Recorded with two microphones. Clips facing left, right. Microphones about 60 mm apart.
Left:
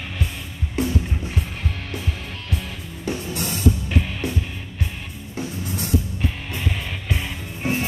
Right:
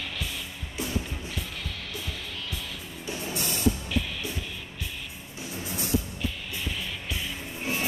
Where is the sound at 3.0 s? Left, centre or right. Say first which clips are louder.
Left 6 dB; left.